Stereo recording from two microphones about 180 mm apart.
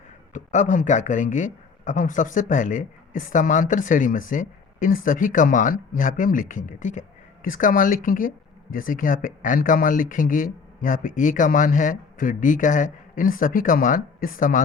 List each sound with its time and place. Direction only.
0.3 s speech: 45° left (ahead or behind)